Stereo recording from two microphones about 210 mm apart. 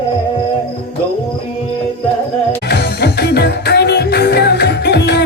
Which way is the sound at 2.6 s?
50° left (ahead or behind).